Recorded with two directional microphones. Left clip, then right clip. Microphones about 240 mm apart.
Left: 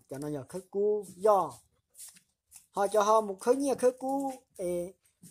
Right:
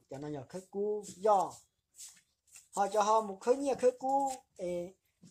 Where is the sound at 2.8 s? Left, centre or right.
Left.